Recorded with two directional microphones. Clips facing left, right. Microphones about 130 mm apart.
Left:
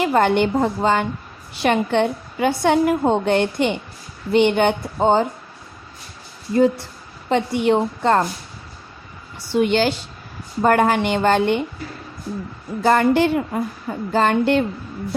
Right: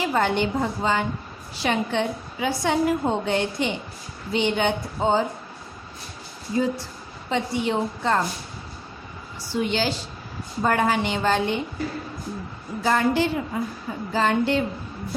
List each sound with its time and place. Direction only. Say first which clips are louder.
0.0 s a woman's voice: left 6 dB; 60° left (ahead or behind)
6.5 s a woman's voice: left 7 dB; 60° left (ahead or behind)
9.5 s a woman's voice: left 7 dB; 60° left (ahead or behind)
12.8 s a woman's voice: left 5 dB; 60° left (ahead or behind)